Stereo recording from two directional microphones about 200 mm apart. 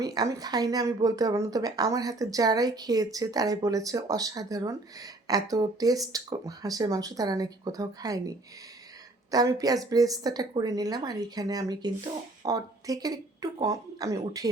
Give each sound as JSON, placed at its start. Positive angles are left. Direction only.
{"t": 0.0, "sound": "speech", "side_deg": -20}
{"t": 9.3, "sound": "a woman's voice", "side_deg": -20}